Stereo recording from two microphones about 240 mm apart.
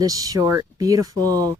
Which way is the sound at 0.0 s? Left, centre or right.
Centre.